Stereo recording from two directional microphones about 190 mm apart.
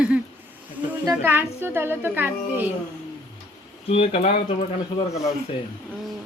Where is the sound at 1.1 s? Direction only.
10° right (ahead or behind).